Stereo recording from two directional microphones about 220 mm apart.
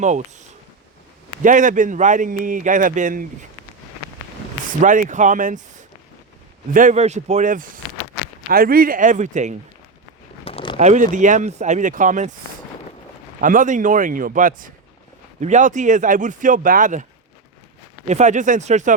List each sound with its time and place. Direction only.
1.4 s a man's voice: 35° right (ahead or behind)
4.8 s a man's voice: 35° right (ahead or behind)
6.7 s a man's voice: 35° right (ahead or behind)
10.4 s a sound: 25° left (ahead or behind)
10.8 s a man's voice: 35° right (ahead or behind)
13.4 s a man's voice: 35° right (ahead or behind)
18.1 s a man's voice: 30° right (ahead or behind)